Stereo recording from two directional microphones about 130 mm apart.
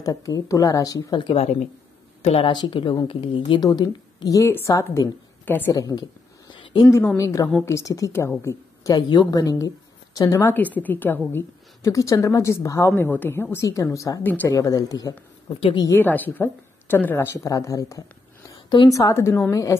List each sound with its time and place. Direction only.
0.0 s a woman's voice: 25° left (ahead or behind)
2.2 s a woman's voice: 45° left (ahead or behind); by 5.7 s 15° left (ahead or behind)
5.7 s a woman's voice: 25° left (ahead or behind)
7.2 s a woman's voice: 25° left (ahead or behind)
10.5 s a woman's voice: 15° left (ahead or behind)
14.2 s a woman's voice: 15° left (ahead or behind)
14.5 s a woman's voice: 25° left (ahead or behind)
15.9 s a woman's voice: 15° left (ahead or behind)